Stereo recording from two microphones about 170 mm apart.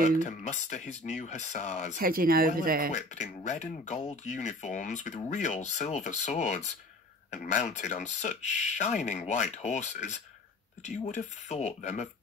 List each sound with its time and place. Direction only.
0.2 s speech: 45° left (ahead or behind)
2.0 s speech: 60° right (ahead or behind)
2.9 s speech: 45° left (ahead or behind)